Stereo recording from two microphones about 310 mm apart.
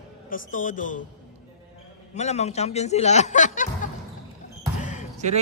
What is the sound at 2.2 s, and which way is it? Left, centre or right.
Speech, left.